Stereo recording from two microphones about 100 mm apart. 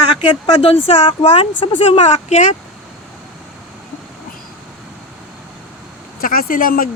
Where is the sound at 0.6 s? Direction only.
90° left.